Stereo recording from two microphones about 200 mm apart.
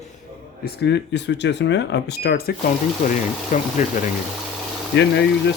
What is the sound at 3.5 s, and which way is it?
Speech, 40° left (ahead or behind).